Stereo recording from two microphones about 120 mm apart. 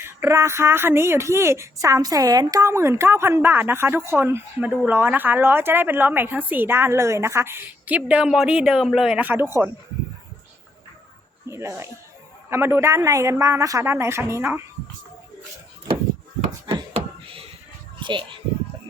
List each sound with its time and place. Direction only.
0.0 s a woman's voice: 20° right (ahead or behind)
11.4 s a woman's voice: 20° right (ahead or behind)
16.9 s a sound: 50° right (ahead or behind)
18.0 s a child's voice: 45° right (ahead or behind)